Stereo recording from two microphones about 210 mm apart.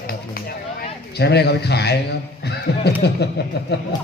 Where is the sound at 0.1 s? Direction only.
45° left (ahead or behind).